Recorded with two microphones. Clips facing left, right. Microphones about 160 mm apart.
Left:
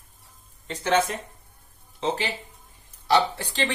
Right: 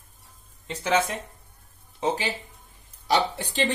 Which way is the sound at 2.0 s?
15° right (ahead or behind).